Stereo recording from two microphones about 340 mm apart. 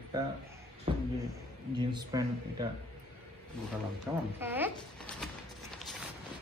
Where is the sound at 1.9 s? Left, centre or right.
Centre.